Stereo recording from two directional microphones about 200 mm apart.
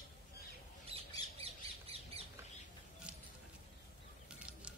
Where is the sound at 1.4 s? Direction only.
30° right (ahead or behind).